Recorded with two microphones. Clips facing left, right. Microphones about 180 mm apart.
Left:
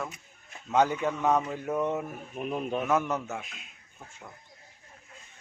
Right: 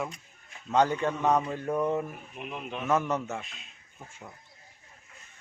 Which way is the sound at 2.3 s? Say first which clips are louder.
Left 7 dB; 40° left (ahead or behind).